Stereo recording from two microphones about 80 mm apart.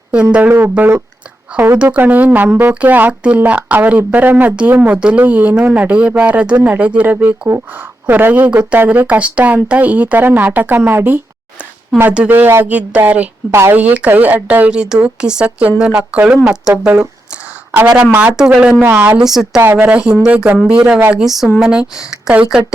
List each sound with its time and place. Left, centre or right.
0.1 s speech: centre
12.3 s speech: right
13.5 s speech: right
13.7 s speech: centre
14.7 s speech: centre
18.3 s speech: centre
18.9 s speech: right
19.1 s speech: centre
19.7 s speech: centre